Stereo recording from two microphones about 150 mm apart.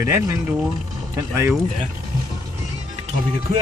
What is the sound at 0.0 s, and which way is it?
Speech, 15° right (ahead or behind).